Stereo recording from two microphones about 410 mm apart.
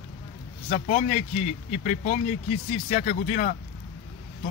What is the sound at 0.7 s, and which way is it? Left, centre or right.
A man's voice, centre.